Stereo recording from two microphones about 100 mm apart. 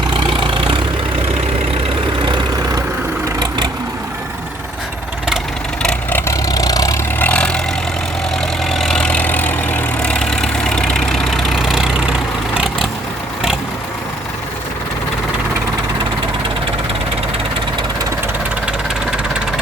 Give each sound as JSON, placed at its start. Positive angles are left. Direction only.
{"t": 0.1, "sound": "vehicle", "side_deg": -55}
{"t": 5.8, "sound": "vehicle", "side_deg": 10}
{"t": 6.1, "sound": "vehicle", "side_deg": 30}
{"t": 7.2, "sound": "vehicle", "side_deg": 10}
{"t": 8.7, "sound": "vehicle", "side_deg": 5}